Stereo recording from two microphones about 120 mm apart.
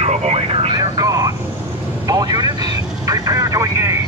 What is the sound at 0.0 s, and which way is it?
Vehicle, 65° right (ahead or behind).